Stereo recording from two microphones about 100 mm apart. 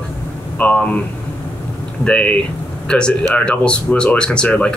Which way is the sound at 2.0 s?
10° left (ahead or behind).